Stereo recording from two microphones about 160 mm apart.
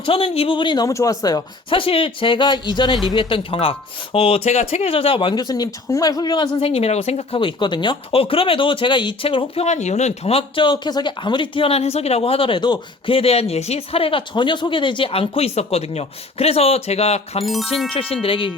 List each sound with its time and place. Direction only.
0.0 s speech: 35° left (ahead or behind)
9.6 s speech: 45° left (ahead or behind)
17.4 s speech: centre (ahead or behind)
17.9 s speech: 35° left (ahead or behind)